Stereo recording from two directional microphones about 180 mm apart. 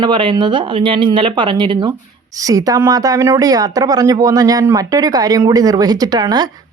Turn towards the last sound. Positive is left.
turn(degrees=-20)  # may be behind; listen again after turning